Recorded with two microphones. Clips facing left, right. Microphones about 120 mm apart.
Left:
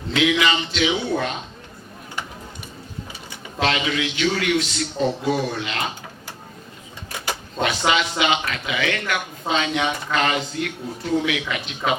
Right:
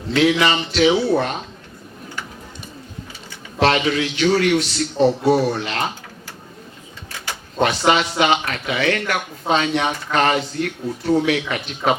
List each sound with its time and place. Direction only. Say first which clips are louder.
0.1 s speech: right 3 dB; 40° right (ahead or behind)
3.6 s speech: right 5 dB; 40° right (ahead or behind)
7.9 s speech: right 3 dB; 45° right (ahead or behind)